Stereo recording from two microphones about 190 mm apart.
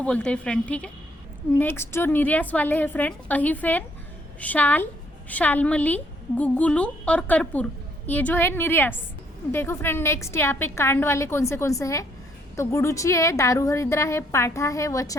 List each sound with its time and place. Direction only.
0.0 s a woman's voice: 5° left (ahead or behind)